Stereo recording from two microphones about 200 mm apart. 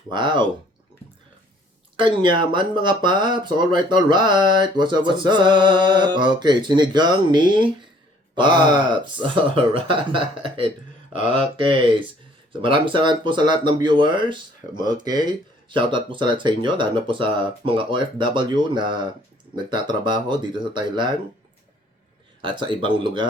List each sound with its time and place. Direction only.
0.1 s speech: 20° right (ahead or behind)
2.0 s speech: 25° right (ahead or behind)
22.4 s speech: 25° right (ahead or behind)